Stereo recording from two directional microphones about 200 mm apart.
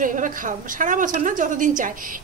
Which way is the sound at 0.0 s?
40° right (ahead or behind).